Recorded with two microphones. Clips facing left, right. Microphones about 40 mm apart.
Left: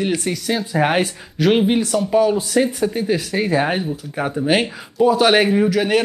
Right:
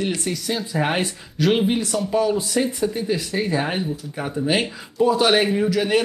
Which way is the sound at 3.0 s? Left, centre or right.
Left.